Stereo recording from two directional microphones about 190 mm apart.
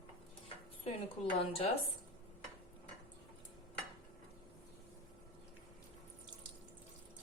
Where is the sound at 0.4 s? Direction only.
30° left (ahead or behind).